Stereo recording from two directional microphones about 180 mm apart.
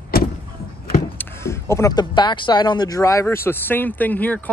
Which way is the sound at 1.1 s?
15° left (ahead or behind).